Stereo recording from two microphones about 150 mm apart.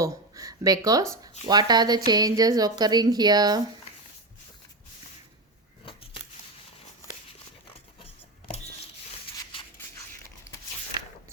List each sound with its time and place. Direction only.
0.0 s speech: 20° right (ahead or behind)